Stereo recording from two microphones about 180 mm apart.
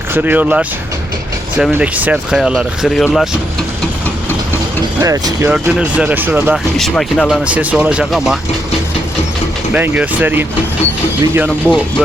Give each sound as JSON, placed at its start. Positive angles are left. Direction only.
{"t": 0.1, "sound": "speech", "side_deg": -10}
{"t": 4.9, "sound": "speech", "side_deg": -20}
{"t": 5.5, "sound": "speech", "side_deg": -5}
{"t": 6.7, "sound": "speech", "side_deg": 5}
{"t": 9.7, "sound": "speech", "side_deg": -10}
{"t": 11.4, "sound": "speech", "side_deg": 5}